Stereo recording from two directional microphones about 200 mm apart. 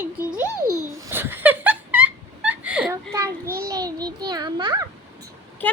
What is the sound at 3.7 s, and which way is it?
Child singing, 20° right (ahead or behind).